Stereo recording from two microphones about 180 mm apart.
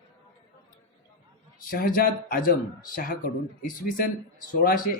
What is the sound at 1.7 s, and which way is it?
Speech, 55° left (ahead or behind).